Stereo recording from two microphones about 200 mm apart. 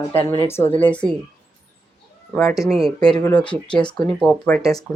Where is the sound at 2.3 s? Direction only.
Centre (ahead or behind).